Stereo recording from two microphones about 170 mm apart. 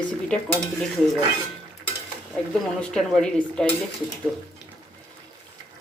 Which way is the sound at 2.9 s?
5° left (ahead or behind).